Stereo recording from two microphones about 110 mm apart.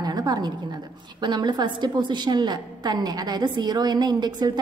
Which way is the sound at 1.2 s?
40° right (ahead or behind).